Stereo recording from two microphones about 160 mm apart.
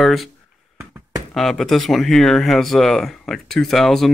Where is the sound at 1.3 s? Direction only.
Centre (ahead or behind).